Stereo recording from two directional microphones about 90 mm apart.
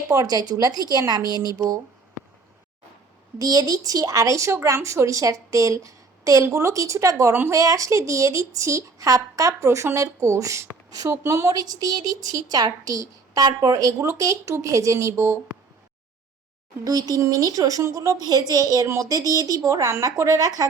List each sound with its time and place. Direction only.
0.1 s a woman's voice: 45° right (ahead or behind)
3.3 s speech: 45° right (ahead or behind); by 15.4 s 30° right (ahead or behind)
16.8 s speech: 45° right (ahead or behind)